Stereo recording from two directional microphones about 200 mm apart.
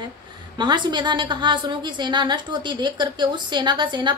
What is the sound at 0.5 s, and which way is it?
A woman's voice, 20° right (ahead or behind).